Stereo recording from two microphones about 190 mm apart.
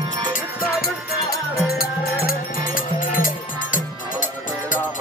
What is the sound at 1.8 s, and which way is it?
Music, 50° left (ahead or behind).